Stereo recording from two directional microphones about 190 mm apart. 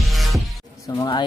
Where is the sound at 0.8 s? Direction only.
20° left (ahead or behind).